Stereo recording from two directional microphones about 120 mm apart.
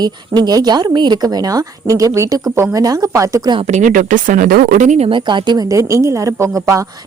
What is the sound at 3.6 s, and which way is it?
Speech, 85° right.